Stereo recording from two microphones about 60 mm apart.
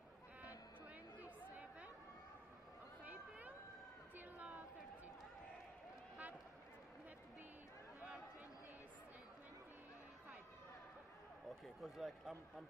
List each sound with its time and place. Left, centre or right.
1.2 s chatter: right
3.1 s a sound: right
11.4 s a man's voice: centre